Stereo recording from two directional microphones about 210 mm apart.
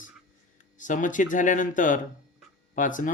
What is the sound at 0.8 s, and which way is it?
Speech, 40° left (ahead or behind).